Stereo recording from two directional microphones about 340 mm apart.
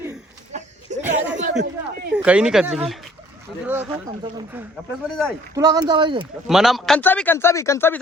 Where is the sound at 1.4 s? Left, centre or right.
Right.